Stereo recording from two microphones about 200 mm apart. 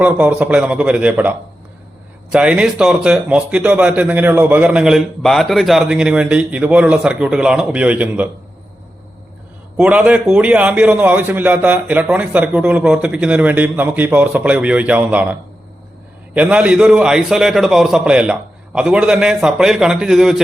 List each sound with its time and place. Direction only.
0.0 s a man's voice: 5° right (ahead or behind)
2.3 s a man's voice: 5° right (ahead or behind)
9.7 s a man's voice: 5° right (ahead or behind)